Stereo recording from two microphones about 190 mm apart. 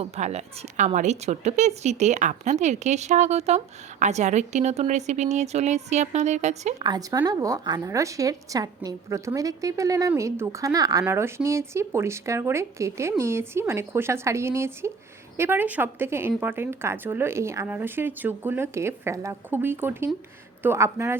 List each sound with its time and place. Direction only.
0.0 s a woman's voice: 35° right (ahead or behind)
6.7 s speech: 20° right (ahead or behind)